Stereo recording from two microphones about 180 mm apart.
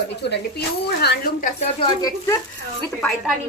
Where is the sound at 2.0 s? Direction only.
20° left (ahead or behind).